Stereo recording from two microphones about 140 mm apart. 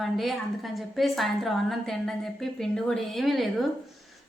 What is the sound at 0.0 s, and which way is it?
A woman's voice, centre (ahead or behind).